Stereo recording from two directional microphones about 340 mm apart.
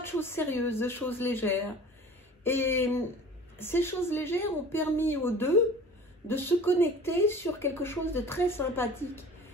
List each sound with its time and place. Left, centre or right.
0.0 s speech: centre